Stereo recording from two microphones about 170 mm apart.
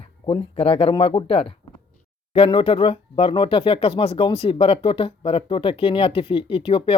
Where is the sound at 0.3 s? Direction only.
35° left (ahead or behind).